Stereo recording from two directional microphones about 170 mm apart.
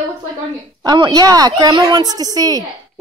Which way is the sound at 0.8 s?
25° right (ahead or behind).